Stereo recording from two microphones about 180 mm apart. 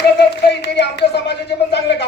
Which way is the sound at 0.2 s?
70° left (ahead or behind).